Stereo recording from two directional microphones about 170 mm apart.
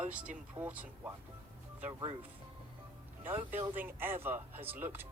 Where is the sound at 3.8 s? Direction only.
10° right (ahead or behind).